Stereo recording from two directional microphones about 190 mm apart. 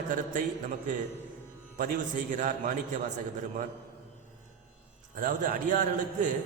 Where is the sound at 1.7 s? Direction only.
45° right (ahead or behind).